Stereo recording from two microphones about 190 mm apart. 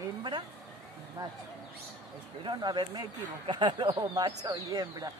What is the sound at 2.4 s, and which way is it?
Speech, 25° right (ahead or behind).